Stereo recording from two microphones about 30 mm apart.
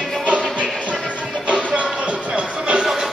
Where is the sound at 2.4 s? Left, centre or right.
Right.